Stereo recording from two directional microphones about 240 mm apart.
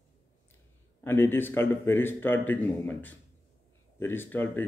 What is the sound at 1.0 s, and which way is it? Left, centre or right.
Speech, centre.